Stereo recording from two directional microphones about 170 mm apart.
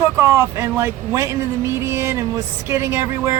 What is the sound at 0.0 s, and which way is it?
Speech, 15° right (ahead or behind).